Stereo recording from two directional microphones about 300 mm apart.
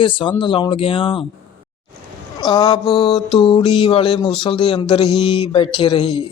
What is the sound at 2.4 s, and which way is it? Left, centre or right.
Mantra, centre.